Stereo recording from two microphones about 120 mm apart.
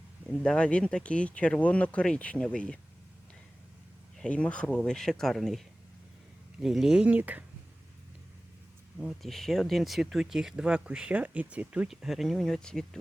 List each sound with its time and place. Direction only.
0.3 s speech: 5° left (ahead or behind)
4.2 s speech: 10° left (ahead or behind); by 7.4 s 15° right (ahead or behind)
9.0 s speech: centre (ahead or behind)